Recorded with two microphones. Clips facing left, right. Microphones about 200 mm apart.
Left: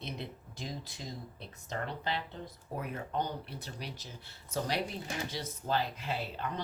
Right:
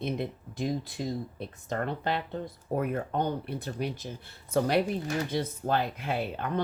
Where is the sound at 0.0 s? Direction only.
55° right (ahead or behind).